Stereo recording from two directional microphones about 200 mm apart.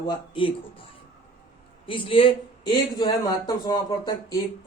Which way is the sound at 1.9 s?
25° left (ahead or behind).